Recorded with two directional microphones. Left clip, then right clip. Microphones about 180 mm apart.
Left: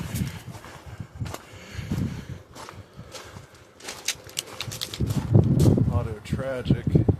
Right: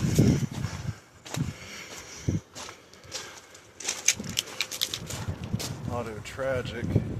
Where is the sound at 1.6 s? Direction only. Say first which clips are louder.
Right 1 dB; 25° left (ahead or behind).